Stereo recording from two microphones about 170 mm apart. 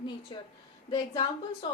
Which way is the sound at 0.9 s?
30° left (ahead or behind).